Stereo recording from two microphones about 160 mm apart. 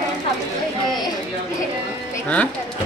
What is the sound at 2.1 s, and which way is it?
Speech, 10° left (ahead or behind).